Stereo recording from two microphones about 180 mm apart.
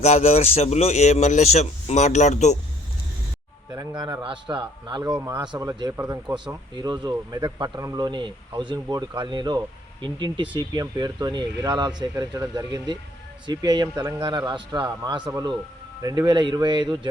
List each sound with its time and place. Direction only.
0.0 s speech: 35° left (ahead or behind)
3.7 s speech: 20° right (ahead or behind)